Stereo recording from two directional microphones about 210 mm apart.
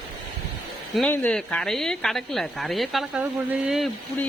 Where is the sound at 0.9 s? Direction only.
5° left (ahead or behind).